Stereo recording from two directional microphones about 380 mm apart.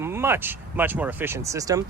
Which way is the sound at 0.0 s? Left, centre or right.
Centre.